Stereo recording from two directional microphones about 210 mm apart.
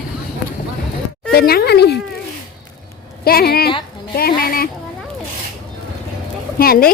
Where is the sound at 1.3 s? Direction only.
45° left (ahead or behind).